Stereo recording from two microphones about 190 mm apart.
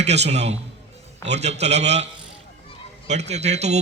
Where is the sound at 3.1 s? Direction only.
35° right (ahead or behind).